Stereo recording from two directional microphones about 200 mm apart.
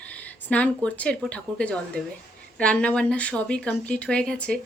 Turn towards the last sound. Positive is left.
turn(degrees=5)  # may be behind; listen again after turning